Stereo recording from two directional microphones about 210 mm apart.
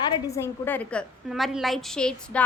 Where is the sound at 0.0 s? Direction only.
20° left (ahead or behind).